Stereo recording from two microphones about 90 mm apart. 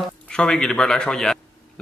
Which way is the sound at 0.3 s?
10° left (ahead or behind).